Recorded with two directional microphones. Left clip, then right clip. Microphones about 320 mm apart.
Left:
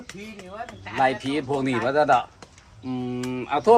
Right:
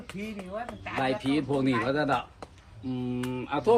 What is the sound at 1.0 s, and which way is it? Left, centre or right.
A man's voice, centre.